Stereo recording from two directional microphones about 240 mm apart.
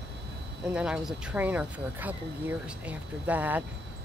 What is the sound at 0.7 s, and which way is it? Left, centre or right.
Speech, centre.